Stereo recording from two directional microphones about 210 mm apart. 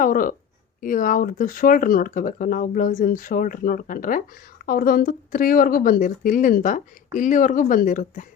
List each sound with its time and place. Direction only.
0.0 s a woman's voice: 40° left (ahead or behind)